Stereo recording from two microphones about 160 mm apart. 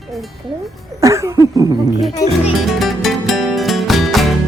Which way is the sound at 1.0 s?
20° right (ahead or behind).